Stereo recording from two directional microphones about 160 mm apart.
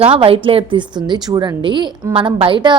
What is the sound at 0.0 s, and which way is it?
A woman's voice, 35° right (ahead or behind).